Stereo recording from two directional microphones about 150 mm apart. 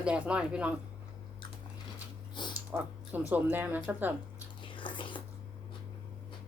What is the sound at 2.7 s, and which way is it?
A woman's voice, 10° right (ahead or behind).